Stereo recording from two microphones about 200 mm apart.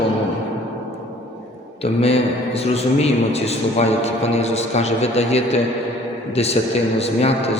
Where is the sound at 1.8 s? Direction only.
30° left (ahead or behind).